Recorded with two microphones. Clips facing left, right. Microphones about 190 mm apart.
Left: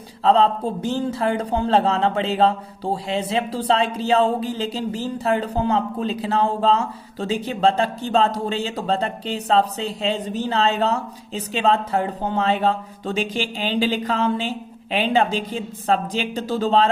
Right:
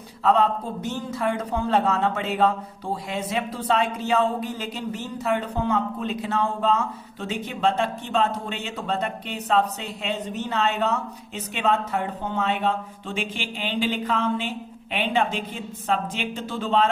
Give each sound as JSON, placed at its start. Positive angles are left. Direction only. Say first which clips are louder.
{"t": 0.2, "sound": "a man's voice", "louder": "left 4 dB", "side_deg": 30}